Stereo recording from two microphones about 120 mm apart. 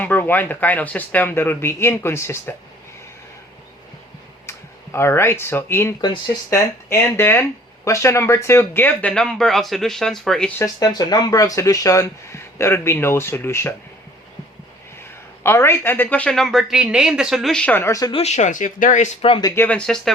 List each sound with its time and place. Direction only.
0.0 s speech: 15° left (ahead or behind)
4.4 s speech: 20° left (ahead or behind)
6.0 s speech: 30° left (ahead or behind); by 10.5 s 5° left (ahead or behind)
10.6 s speech: 30° left (ahead or behind)
15.0 s a man's voice: 20° left (ahead or behind)
16.3 s speech: centre (ahead or behind)
17.8 s speech: 30° left (ahead or behind)
18.1 s speech: 65° left (ahead or behind); by 19.1 s 90° left
19.5 s speech: 10° left (ahead or behind)